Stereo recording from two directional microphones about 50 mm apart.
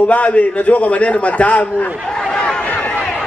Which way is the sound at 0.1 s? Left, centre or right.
Left.